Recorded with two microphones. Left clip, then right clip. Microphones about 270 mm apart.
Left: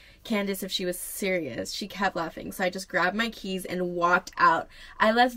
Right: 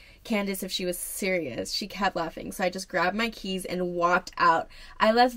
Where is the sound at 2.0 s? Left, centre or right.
Centre.